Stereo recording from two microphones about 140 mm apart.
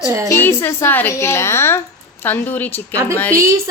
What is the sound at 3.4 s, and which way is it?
Speech, 25° right (ahead or behind).